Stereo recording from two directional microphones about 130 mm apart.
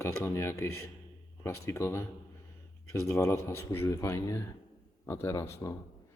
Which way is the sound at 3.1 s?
20° left (ahead or behind).